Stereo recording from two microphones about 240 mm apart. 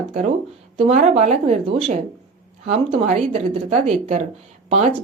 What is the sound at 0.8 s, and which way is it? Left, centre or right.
Speech, right.